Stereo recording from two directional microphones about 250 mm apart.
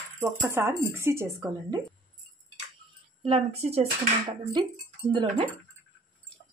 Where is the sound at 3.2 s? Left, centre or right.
Right.